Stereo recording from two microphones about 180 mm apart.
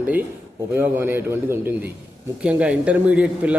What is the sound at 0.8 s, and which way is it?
A man's voice, 10° right (ahead or behind).